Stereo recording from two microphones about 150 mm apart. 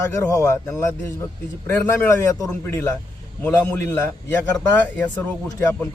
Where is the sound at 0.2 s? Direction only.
15° left (ahead or behind).